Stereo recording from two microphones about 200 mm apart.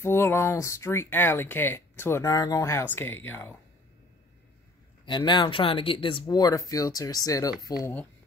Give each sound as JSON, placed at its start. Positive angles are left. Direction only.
{"t": 0.0, "sound": "speech", "side_deg": 10}
{"t": 5.0, "sound": "speech", "side_deg": 20}